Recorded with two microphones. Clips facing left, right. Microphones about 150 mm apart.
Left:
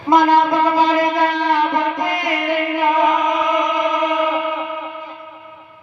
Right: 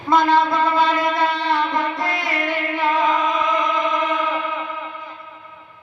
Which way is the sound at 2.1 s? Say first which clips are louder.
Left 4 dB; 45° left (ahead or behind).